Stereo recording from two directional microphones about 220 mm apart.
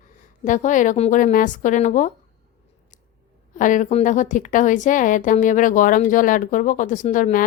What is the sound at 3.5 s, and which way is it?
A woman's voice, 35° left (ahead or behind).